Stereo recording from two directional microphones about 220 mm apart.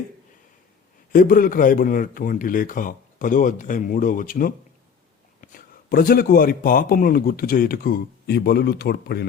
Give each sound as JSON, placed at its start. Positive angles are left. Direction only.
{"t": 1.1, "sound": "a man's voice", "side_deg": 40}